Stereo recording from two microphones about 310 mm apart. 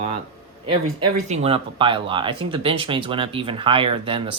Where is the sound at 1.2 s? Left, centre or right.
Centre.